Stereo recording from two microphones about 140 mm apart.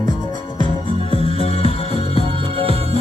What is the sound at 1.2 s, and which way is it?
Music, 45° left (ahead or behind).